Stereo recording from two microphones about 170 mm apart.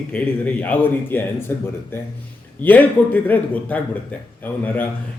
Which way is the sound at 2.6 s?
10° left (ahead or behind).